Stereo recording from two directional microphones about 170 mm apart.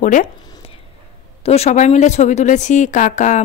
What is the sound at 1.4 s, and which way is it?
A woman's voice, 40° left (ahead or behind).